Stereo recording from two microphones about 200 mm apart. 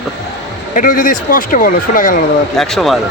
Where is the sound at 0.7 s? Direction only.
45° left (ahead or behind).